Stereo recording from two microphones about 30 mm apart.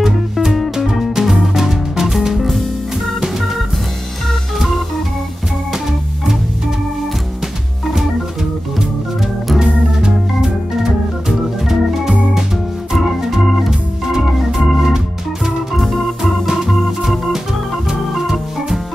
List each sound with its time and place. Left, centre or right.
0.0 s music: centre
9.6 s organ: right
16.2 s organ: centre
18.1 s organ: centre